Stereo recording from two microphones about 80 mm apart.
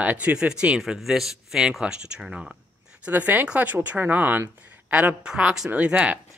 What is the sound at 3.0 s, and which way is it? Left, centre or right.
Speech, centre.